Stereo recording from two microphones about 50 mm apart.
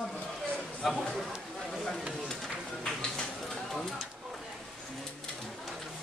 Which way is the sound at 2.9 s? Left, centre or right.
Centre.